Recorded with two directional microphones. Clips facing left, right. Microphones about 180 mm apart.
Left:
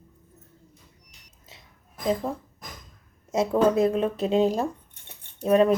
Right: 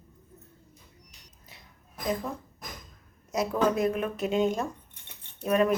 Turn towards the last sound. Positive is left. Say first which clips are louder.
# left 5 dB
turn(degrees=30)  # may be behind; listen again after turning